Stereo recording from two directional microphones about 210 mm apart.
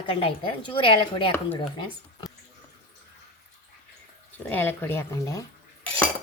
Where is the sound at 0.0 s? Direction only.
25° left (ahead or behind).